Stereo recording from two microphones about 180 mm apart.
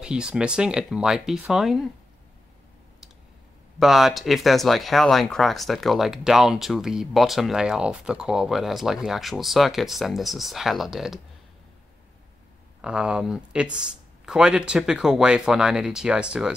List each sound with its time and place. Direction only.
0.0 s speech: 5° right (ahead or behind)
3.8 s speech: centre (ahead or behind)
12.8 s speech: 5° right (ahead or behind)